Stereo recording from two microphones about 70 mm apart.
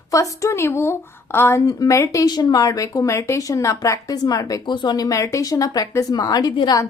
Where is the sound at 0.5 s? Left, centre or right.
Left.